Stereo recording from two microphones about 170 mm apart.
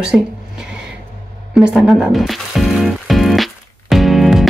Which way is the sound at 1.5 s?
Centre (ahead or behind).